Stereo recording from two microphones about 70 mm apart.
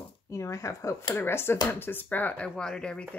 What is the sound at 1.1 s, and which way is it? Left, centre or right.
Speech, left.